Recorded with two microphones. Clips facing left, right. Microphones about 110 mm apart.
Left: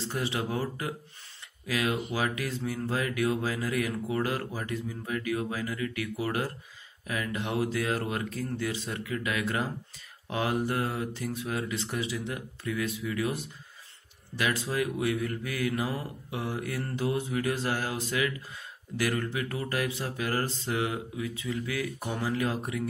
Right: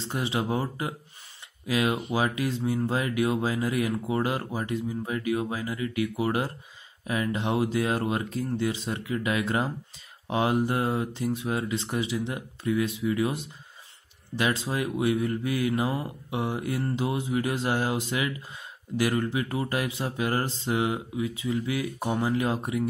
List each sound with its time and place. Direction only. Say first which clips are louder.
0.0 s speech: right 2 dB; 20° right (ahead or behind)